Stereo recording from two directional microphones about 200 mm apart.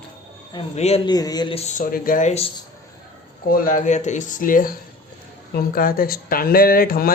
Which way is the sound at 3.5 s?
45° left (ahead or behind).